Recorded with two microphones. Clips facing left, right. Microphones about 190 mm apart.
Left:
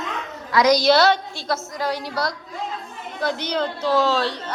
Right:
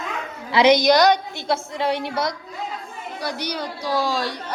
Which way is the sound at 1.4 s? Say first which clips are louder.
Right 2 dB; 30° right (ahead or behind).